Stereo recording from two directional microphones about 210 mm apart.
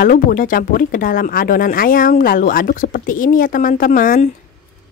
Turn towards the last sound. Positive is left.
turn(degrees=40)  # may be behind; listen again after turning